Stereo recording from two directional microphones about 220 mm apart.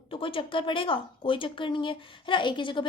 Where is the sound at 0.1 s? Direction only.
25° left (ahead or behind).